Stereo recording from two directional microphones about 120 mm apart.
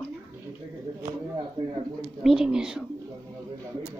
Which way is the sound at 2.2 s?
5° right (ahead or behind).